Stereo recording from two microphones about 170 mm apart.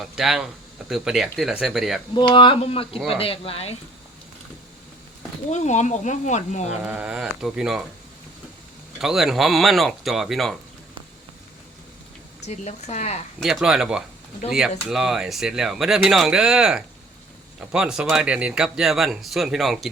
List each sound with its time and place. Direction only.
0.0 s speech: centre (ahead or behind)
2.1 s speech: 30° left (ahead or behind)
5.5 s speech: 40° left (ahead or behind)
6.8 s speech: 5° right (ahead or behind)
9.0 s speech: centre (ahead or behind)
12.5 s speech: 40° left (ahead or behind)
13.4 s speech: centre (ahead or behind)